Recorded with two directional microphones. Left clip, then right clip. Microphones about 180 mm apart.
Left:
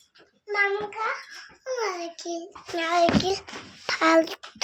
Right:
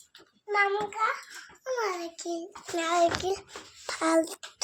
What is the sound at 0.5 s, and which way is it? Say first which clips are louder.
Speech: left 1 dB; 5° right (ahead or behind).